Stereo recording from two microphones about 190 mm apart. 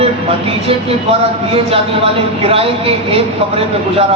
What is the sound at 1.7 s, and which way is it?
Speech, 30° right (ahead or behind).